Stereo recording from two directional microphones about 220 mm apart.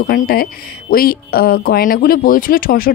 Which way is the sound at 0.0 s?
45° left (ahead or behind).